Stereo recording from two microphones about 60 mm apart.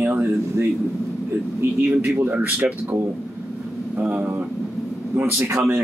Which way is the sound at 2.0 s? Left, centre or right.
Right.